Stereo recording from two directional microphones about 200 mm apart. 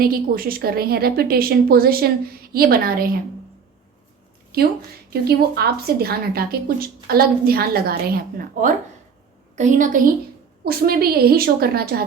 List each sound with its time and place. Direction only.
0.0 s a woman's voice: 45° right (ahead or behind)
5.2 s a woman's voice: 50° right (ahead or behind)